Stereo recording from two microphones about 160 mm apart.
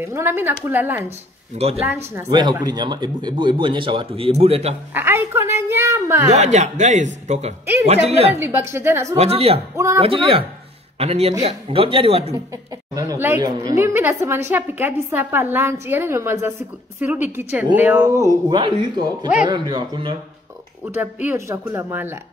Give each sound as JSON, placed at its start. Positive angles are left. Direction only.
{"t": 0.0, "sound": "a woman's voice", "side_deg": -15}
{"t": 2.1, "sound": "speech", "side_deg": -25}
{"t": 4.9, "sound": "a woman's voice", "side_deg": -15}
{"t": 6.3, "sound": "speech", "side_deg": -45}
{"t": 8.4, "sound": "a woman's voice", "side_deg": -15}
{"t": 9.1, "sound": "speech", "side_deg": -40}
{"t": 12.9, "sound": "a woman's voice", "side_deg": -20}
{"t": 20.8, "sound": "a woman's voice", "side_deg": -10}